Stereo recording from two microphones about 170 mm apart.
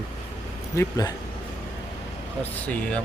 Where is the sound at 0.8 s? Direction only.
20° left (ahead or behind).